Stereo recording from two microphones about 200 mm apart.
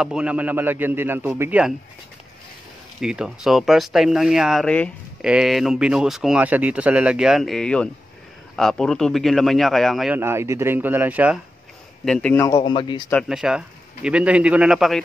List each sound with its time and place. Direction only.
0.0 s a man's voice: 5° right (ahead or behind)
3.0 s a man's voice: 5° right (ahead or behind)
12.0 s a man's voice: 5° left (ahead or behind)
12.5 s speech: 25° left (ahead or behind)
13.3 s a man's voice: 5° right (ahead or behind)